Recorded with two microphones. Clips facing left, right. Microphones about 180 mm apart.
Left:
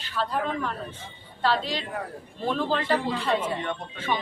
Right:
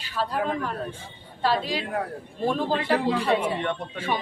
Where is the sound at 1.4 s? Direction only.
10° right (ahead or behind).